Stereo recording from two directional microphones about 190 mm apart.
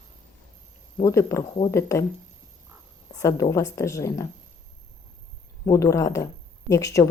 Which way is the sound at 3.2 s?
15° left (ahead or behind).